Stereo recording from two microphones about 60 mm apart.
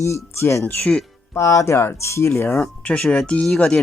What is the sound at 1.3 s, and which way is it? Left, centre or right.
Speech, left.